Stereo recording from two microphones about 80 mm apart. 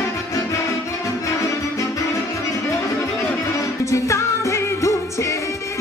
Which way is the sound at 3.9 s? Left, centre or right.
Left.